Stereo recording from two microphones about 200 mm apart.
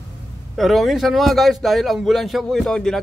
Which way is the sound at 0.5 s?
Centre (ahead or behind).